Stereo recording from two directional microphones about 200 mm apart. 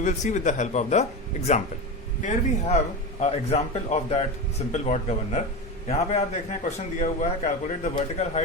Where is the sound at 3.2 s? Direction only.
30° left (ahead or behind).